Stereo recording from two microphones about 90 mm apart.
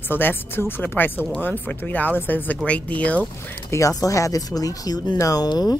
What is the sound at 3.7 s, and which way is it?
Speech, 35° left (ahead or behind).